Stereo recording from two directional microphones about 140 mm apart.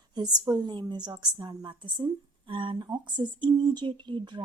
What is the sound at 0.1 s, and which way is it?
Speech, 30° right (ahead or behind).